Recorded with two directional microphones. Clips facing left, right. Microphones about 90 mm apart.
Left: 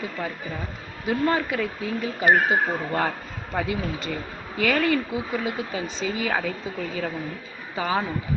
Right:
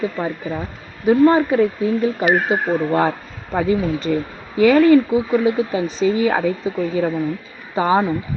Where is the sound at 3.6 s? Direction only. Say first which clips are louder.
Right 9 dB; 35° right (ahead or behind).